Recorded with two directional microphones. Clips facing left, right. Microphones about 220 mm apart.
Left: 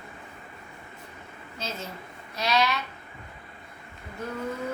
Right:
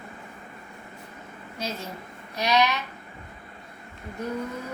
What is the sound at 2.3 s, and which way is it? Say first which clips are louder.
Speech: right 2 dB; 15° right (ahead or behind).